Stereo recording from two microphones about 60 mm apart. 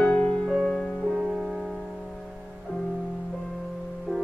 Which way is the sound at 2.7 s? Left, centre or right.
Left.